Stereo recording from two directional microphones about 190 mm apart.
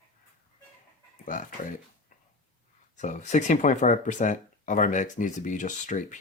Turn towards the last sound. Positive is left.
turn(degrees=40)  # may be behind; listen again after turning